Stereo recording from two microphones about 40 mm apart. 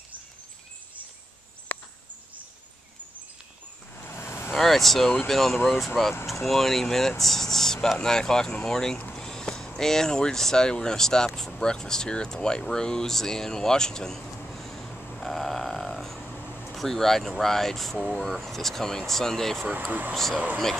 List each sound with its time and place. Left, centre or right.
1.7 s cricket: left
3.9 s vehicle: left
4.6 s speech: centre
9.1 s a sound: centre
9.8 s speech: centre
14.5 s vehicle: centre
15.1 s a sound: centre
16.7 s speech: centre
19.9 s speech: right